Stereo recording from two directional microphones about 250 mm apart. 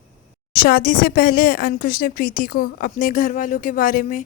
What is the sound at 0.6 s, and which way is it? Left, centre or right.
A woman's voice, left.